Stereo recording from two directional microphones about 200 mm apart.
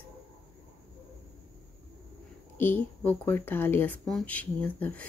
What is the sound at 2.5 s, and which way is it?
Speech, 10° left (ahead or behind).